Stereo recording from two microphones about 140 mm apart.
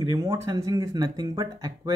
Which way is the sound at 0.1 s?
25° right (ahead or behind).